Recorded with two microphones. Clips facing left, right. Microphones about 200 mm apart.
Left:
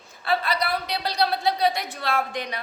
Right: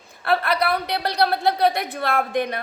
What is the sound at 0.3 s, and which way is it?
A woman's voice, 60° right (ahead or behind).